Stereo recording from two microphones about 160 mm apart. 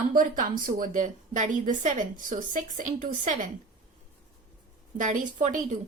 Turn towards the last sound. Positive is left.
turn(degrees=-50)  # may be behind; listen again after turning